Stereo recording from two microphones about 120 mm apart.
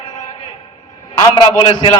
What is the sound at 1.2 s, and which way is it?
Speech, 35° left (ahead or behind).